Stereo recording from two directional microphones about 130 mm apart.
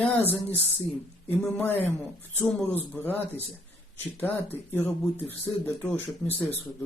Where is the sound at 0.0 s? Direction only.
15° left (ahead or behind).